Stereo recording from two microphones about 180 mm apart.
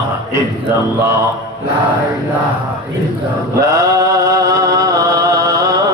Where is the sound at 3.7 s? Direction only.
20° right (ahead or behind).